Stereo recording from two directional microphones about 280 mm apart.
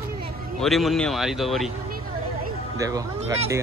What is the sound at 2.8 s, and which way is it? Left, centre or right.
Speech, centre.